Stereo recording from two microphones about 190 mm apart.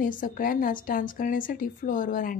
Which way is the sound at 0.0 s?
45° left (ahead or behind).